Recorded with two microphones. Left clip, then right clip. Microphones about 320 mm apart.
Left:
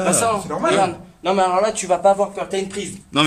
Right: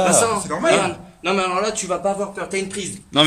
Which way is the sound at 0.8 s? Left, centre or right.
Centre.